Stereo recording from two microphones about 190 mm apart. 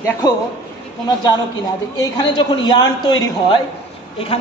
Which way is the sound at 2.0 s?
25° left (ahead or behind).